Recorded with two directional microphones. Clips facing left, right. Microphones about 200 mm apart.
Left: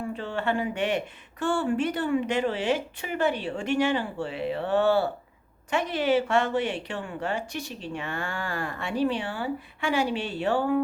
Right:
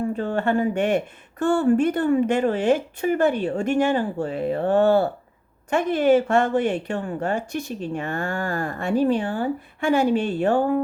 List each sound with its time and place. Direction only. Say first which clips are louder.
0.1 s speech: right 6 dB; 45° right (ahead or behind)